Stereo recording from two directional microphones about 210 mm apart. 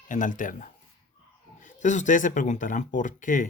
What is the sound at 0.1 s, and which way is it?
Speech, 40° left (ahead or behind).